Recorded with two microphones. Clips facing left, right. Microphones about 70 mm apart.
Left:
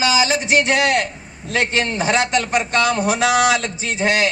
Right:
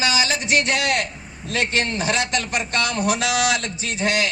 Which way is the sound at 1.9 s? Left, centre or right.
Left.